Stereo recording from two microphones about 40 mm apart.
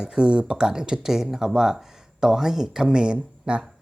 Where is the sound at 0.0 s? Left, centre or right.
Right.